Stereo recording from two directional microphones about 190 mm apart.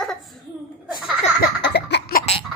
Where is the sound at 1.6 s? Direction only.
65° left (ahead or behind).